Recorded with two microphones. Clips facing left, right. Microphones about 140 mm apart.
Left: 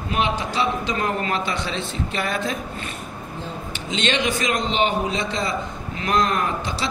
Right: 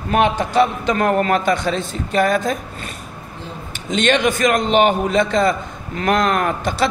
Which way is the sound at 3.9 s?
50° right (ahead or behind).